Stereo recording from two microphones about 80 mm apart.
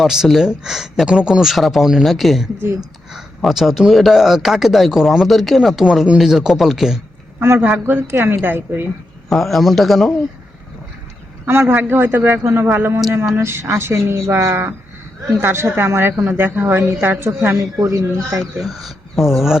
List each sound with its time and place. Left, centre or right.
0.0 s speech: centre
7.3 s a woman's voice: right
9.3 s speech: centre
11.4 s a woman's voice: right
17.5 s speech: right
18.2 s a woman's voice: right
18.6 s speech: centre